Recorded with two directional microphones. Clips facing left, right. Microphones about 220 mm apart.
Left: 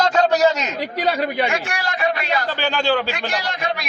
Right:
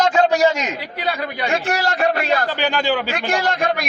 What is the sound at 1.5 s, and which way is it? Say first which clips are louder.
A man's voice: right 4 dB; 40° right (ahead or behind).